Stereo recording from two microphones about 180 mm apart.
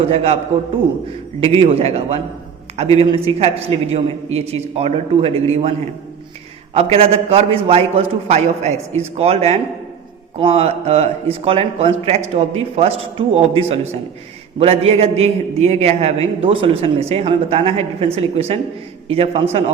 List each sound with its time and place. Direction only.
0.1 s a man's voice: 35° right (ahead or behind)
1.4 s a man's voice: 35° right (ahead or behind)
6.7 s a man's voice: 35° right (ahead or behind)